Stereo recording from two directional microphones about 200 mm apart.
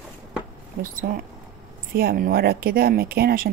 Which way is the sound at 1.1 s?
50° right (ahead or behind).